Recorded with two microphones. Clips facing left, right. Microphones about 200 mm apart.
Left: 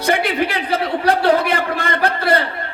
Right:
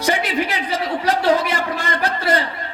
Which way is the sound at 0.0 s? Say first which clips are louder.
Left 2 dB; 60° left (ahead or behind).